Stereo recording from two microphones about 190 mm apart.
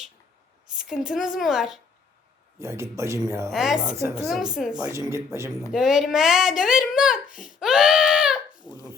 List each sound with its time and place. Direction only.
0.8 s speech: centre (ahead or behind)
2.6 s speech: 15° right (ahead or behind)
3.5 s speech: centre (ahead or behind)
4.9 s speech: 15° right (ahead or behind)
5.7 s speech: centre (ahead or behind)
7.3 s a sound: 5° right (ahead or behind)